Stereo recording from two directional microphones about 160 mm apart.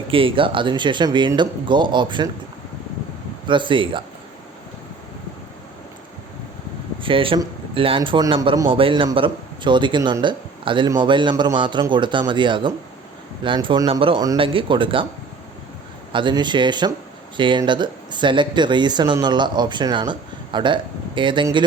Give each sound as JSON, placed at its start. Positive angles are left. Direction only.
{"t": 0.1, "sound": "a man's voice", "side_deg": -35}
{"t": 3.4, "sound": "speech", "side_deg": -30}
{"t": 7.0, "sound": "a man's voice", "side_deg": -35}
{"t": 16.1, "sound": "a man's voice", "side_deg": -30}